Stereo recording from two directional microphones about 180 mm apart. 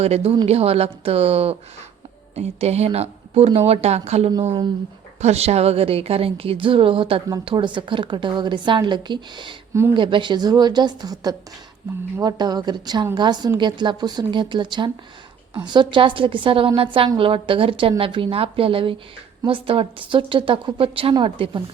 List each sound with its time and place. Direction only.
0.0 s a woman's voice: 35° right (ahead or behind)